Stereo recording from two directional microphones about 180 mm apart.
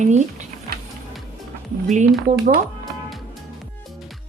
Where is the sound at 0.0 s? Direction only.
40° right (ahead or behind).